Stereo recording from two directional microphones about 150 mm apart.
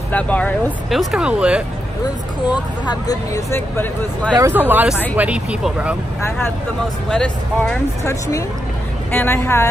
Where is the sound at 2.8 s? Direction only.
25° left (ahead or behind).